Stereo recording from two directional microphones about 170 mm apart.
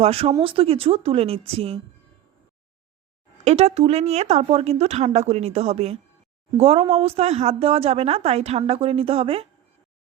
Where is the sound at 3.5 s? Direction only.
40° right (ahead or behind).